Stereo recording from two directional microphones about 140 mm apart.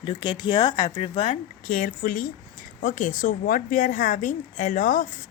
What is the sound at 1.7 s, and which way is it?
A woman's voice, 85° left.